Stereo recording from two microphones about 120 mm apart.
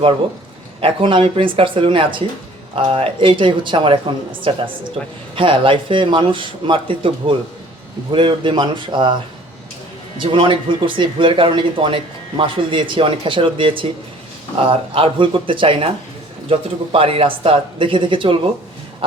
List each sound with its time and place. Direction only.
0.8 s speech: 50° right (ahead or behind)
10.2 s speech: 45° right (ahead or behind)